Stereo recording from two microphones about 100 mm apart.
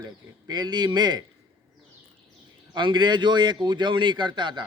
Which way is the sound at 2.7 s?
50° right (ahead or behind).